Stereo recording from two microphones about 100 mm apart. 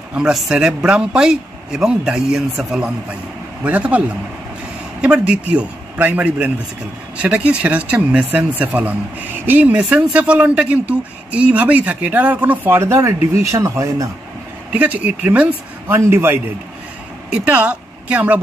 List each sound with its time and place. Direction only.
0.1 s speech: 5° right (ahead or behind)
5.0 s speech: 10° right (ahead or behind); by 14.0 s 35° right (ahead or behind)
14.7 s speech: 15° right (ahead or behind)